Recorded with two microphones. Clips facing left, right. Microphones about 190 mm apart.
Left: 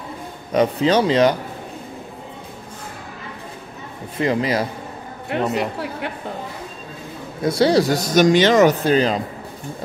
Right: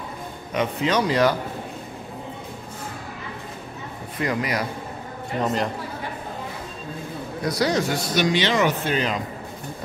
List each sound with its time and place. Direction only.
0.5 s speech: 35° left (ahead or behind)
4.2 s speech: 25° left (ahead or behind)
5.4 s speech: 5° left (ahead or behind)
5.8 s speech: 70° left (ahead or behind)
7.4 s speech: 30° left (ahead or behind)